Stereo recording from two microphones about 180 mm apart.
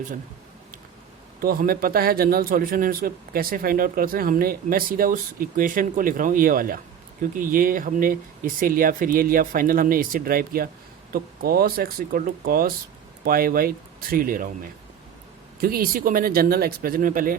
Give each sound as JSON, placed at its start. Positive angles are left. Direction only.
{"t": 1.4, "sound": "a man's voice", "side_deg": -50}
{"t": 15.6, "sound": "a man's voice", "side_deg": -55}